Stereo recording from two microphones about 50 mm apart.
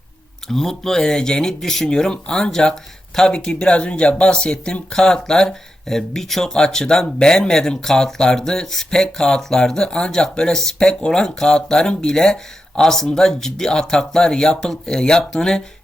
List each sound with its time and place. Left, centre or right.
0.4 s speech: centre